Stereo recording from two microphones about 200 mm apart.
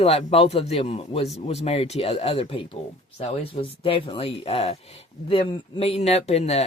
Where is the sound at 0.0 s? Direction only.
30° left (ahead or behind).